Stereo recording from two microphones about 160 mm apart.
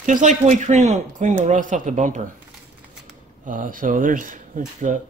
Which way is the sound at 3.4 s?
55° right (ahead or behind).